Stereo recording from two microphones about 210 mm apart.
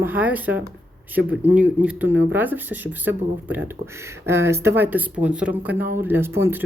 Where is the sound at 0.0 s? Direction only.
10° right (ahead or behind).